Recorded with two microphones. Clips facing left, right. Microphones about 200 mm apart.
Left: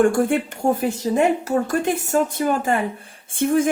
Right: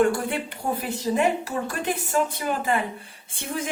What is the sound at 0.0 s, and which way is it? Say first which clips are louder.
A woman's voice: left 5 dB; 50° left (ahead or behind).